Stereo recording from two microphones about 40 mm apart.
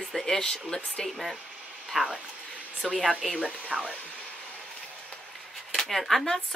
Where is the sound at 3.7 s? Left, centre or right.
Centre.